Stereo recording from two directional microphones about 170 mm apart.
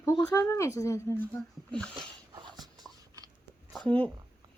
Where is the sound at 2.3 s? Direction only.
25° right (ahead or behind).